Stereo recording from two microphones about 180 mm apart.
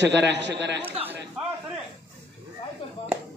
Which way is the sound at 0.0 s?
75° right (ahead or behind).